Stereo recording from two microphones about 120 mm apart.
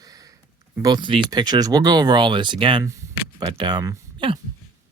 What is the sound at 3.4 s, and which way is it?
Speech, 40° right (ahead or behind).